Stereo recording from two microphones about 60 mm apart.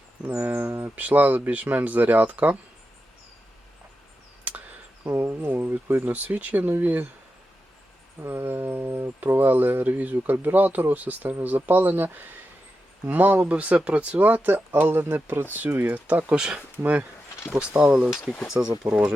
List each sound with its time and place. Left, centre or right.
0.3 s speech: right
5.0 s speech: right
5.3 s speech: right
8.2 s speech: right
17.9 s speech: centre